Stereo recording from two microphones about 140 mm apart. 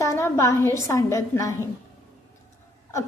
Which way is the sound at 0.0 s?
20° left (ahead or behind).